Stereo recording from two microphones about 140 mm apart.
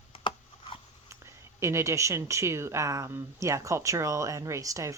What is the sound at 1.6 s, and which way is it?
Speech, 20° right (ahead or behind).